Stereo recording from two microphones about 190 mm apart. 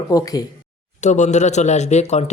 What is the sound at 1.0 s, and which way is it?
Speech, 40° left (ahead or behind).